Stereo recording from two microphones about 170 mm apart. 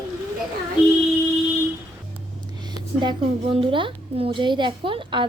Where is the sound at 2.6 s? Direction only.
25° right (ahead or behind).